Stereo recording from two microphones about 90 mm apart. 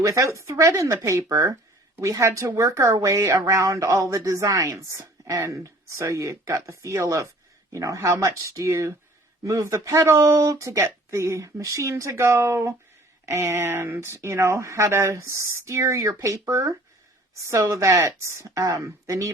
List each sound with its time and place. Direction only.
0.0 s speech: 35° right (ahead or behind)